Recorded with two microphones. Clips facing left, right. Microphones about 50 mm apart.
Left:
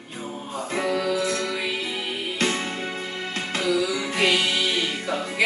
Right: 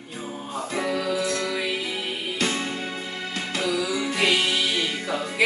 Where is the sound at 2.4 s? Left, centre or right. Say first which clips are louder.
Left 1 dB; left.